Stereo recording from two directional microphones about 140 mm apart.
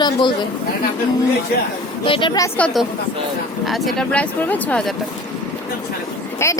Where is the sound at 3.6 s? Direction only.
Centre (ahead or behind).